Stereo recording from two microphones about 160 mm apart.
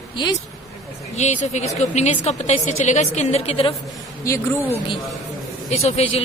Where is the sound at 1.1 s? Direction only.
45° left (ahead or behind).